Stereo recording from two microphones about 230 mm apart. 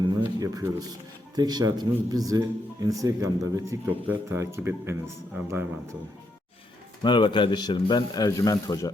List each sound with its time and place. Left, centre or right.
0.0 s a sound: centre
1.4 s speech: centre
7.0 s speech: left